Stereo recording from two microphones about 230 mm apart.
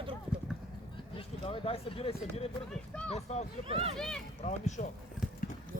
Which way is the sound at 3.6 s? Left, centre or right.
Right.